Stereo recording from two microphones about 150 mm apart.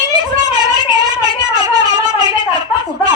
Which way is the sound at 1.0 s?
25° right (ahead or behind).